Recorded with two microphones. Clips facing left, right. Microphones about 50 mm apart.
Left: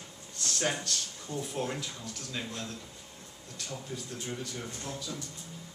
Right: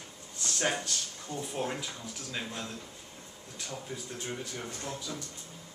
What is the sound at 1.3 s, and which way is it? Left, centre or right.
Speech, centre.